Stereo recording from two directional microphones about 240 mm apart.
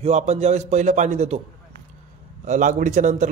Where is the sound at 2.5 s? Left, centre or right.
Right.